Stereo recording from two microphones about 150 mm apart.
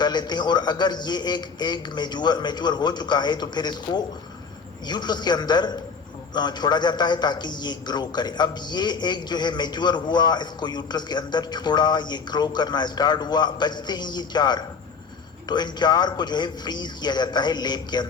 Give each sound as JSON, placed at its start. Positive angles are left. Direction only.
{"t": 0.0, "sound": "a man's voice", "side_deg": 30}